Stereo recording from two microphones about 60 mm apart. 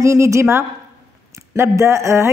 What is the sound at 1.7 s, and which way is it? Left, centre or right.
Speech, right.